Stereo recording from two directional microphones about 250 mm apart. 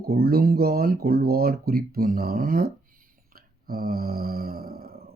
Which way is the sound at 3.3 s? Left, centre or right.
Right.